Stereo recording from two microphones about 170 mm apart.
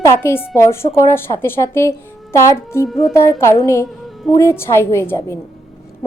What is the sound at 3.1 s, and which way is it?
A woman's voice, 15° left (ahead or behind).